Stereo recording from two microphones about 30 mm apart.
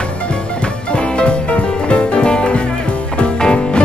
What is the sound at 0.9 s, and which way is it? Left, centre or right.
Music, left.